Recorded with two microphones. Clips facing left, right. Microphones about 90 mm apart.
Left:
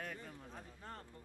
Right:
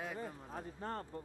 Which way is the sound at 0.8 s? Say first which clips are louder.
Right 10 dB; 60° right (ahead or behind).